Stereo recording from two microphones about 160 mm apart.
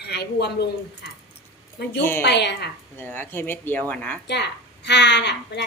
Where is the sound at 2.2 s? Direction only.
90° left.